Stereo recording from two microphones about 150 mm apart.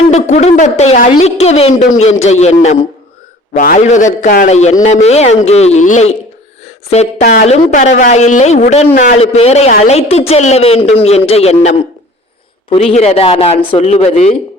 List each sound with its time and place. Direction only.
0.1 s a man's voice: 50° left (ahead or behind)
3.5 s a man's voice: 60° left (ahead or behind)
7.4 s a man's voice: 50° left (ahead or behind)
12.7 s a man's voice: 45° left (ahead or behind)